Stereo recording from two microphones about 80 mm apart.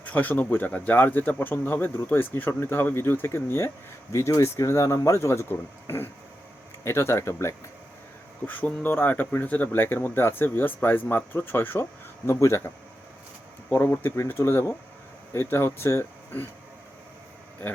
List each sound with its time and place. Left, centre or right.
0.0 s speech: left
8.4 s speech: centre; by 12.7 s left
13.7 s speech: left